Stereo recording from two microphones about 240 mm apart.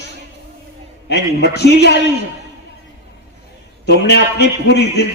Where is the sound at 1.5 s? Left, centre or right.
Left.